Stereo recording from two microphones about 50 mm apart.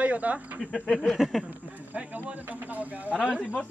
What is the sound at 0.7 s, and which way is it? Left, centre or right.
Speech, centre.